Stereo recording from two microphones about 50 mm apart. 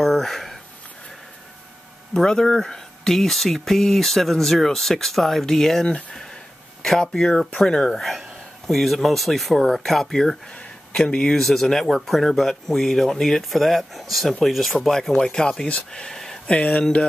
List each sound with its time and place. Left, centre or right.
0.0 s a sound: centre
2.1 s speech: centre
5.9 s speech: centre
15.0 s speech: centre
16.5 s speech: centre